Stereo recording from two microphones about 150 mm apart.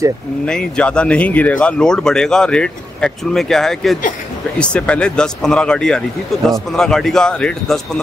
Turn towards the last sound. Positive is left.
turn(degrees=5)  # may be behind; listen again after turning